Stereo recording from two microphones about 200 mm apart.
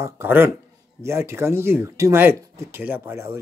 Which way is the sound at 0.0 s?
10° right (ahead or behind).